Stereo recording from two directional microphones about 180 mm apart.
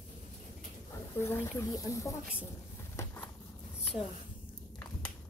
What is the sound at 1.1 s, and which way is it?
Speech, 15° left (ahead or behind).